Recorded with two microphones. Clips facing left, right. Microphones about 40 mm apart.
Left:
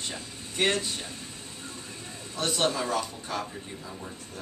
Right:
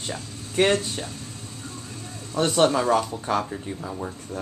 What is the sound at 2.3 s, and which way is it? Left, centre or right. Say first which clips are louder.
Speech: right 8 dB; right.